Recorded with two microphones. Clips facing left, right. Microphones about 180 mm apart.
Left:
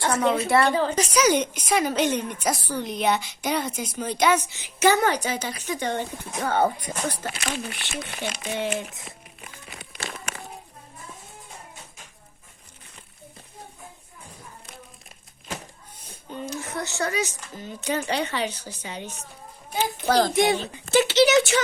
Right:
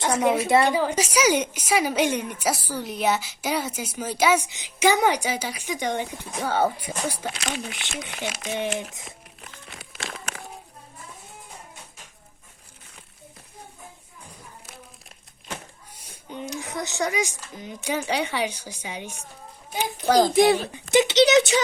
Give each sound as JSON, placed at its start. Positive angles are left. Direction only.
{"t": 0.0, "sound": "a woman's voice", "side_deg": -15}
{"t": 7.3, "sound": "speech", "side_deg": 5}
{"t": 9.0, "sound": "a sound", "side_deg": 0}
{"t": 16.0, "sound": "a woman's voice", "side_deg": -15}
{"t": 20.3, "sound": "speech", "side_deg": -35}
{"t": 20.9, "sound": "a woman's voice", "side_deg": -20}